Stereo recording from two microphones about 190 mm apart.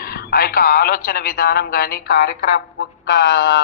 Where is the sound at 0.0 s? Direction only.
55° left (ahead or behind).